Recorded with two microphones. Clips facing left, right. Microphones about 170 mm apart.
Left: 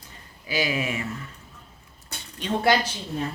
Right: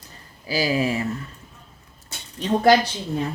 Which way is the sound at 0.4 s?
35° right (ahead or behind).